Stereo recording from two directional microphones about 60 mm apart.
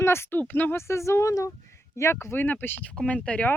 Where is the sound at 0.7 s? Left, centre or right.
Left.